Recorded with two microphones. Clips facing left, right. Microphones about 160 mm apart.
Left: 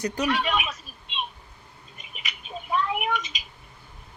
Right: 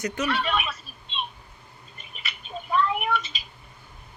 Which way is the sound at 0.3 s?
15° left (ahead or behind).